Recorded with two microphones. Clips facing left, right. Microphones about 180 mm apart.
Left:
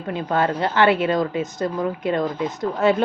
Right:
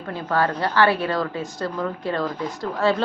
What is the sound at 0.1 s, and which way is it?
Speech, 20° left (ahead or behind).